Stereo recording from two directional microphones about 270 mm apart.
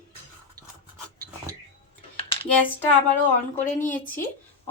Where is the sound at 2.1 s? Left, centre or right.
Centre.